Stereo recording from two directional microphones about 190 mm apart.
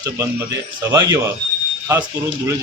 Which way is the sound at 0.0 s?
15° right (ahead or behind).